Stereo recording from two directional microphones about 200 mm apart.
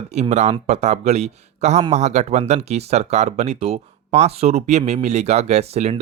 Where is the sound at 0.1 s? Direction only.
35° right (ahead or behind).